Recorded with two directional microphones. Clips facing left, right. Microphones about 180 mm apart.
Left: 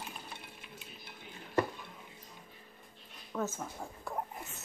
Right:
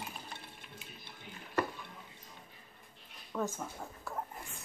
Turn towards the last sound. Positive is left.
turn(degrees=5)  # may be behind; listen again after turning